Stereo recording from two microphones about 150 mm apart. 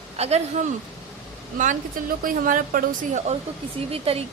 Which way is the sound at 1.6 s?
60° right (ahead or behind).